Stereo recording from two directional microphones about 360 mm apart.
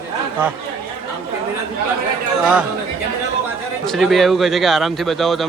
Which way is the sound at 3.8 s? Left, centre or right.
Centre.